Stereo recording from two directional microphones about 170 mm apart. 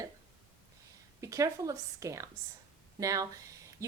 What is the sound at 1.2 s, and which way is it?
A woman's voice, 20° right (ahead or behind).